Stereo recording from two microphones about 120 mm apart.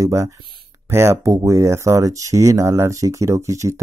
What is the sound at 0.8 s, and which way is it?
Speech, 20° right (ahead or behind).